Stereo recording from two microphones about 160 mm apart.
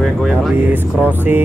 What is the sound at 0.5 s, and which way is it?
Speech, 10° right (ahead or behind).